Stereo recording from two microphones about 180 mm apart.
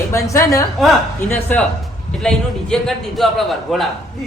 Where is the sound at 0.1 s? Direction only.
15° left (ahead or behind).